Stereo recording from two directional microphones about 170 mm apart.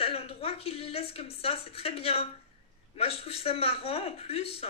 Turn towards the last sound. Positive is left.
turn(degrees=35)  # may be behind; listen again after turning